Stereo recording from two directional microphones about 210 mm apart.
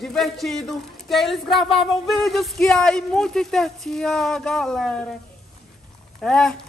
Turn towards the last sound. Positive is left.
turn(degrees=5)  # may be behind; listen again after turning